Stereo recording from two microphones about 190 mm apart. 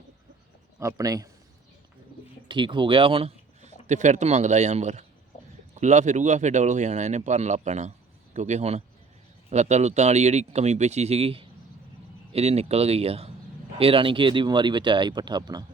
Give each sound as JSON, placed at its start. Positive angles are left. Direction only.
{"t": 0.8, "sound": "speech", "side_deg": -15}
{"t": 2.5, "sound": "a man's voice", "side_deg": -25}